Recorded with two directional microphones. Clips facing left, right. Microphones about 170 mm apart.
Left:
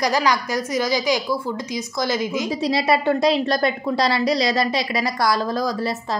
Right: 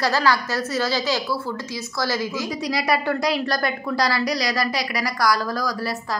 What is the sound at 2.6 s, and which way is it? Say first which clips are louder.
A woman's voice: left 3 dB; 25° left (ahead or behind).